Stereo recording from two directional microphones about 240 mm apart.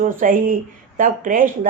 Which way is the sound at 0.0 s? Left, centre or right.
Right.